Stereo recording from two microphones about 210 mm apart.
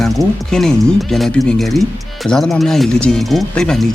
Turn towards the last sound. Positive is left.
turn(degrees=5)  # may be behind; listen again after turning